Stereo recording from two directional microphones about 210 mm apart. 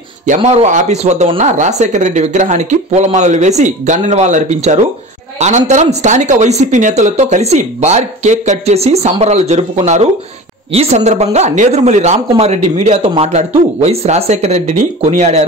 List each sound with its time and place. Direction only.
0.3 s speech: 30° right (ahead or behind)